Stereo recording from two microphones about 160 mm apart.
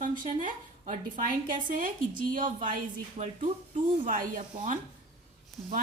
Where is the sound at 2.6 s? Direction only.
50° right (ahead or behind).